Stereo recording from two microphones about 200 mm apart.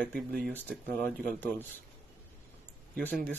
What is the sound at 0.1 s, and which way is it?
Speech, 50° right (ahead or behind).